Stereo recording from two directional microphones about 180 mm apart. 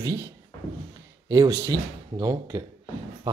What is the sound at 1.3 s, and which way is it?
Speech, 25° right (ahead or behind).